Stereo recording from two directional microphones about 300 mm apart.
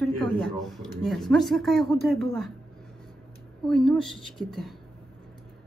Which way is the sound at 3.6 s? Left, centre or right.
Centre.